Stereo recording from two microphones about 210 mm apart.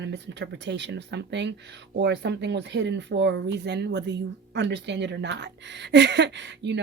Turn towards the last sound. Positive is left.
turn(degrees=-55)  # may be behind; listen again after turning